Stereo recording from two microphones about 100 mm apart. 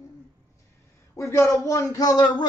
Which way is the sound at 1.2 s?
30° left (ahead or behind).